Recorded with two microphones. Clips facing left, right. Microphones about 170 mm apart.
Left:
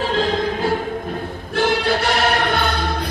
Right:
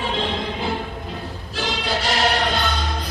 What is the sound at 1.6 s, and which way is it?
Music, 55° left (ahead or behind).